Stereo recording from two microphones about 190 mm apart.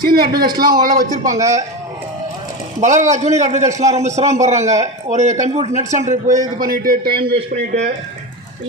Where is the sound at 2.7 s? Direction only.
40° right (ahead or behind).